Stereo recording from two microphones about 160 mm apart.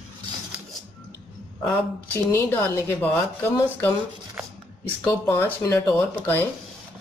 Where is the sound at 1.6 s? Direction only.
10° left (ahead or behind).